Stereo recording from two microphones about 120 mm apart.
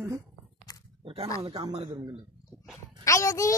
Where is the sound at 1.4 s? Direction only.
35° right (ahead or behind).